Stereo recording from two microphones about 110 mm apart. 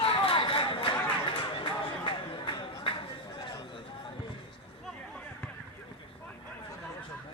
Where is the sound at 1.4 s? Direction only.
55° left (ahead or behind).